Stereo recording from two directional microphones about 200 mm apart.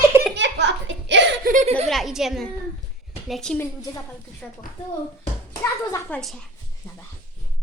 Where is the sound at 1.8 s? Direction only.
Centre (ahead or behind).